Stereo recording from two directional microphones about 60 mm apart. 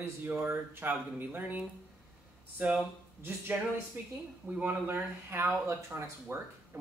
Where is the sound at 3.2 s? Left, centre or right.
Right.